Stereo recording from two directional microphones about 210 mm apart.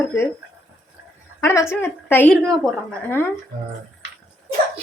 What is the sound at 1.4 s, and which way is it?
A woman's voice, 15° left (ahead or behind).